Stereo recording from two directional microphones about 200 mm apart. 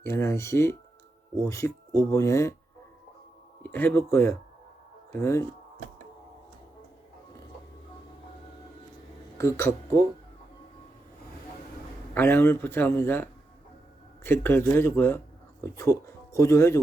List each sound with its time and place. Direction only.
0.0 s speech: 15° left (ahead or behind)
3.6 s speech: 10° left (ahead or behind)
9.4 s speech: 15° left (ahead or behind)
12.1 s speech: 10° left (ahead or behind)
14.3 s speech: 10° left (ahead or behind)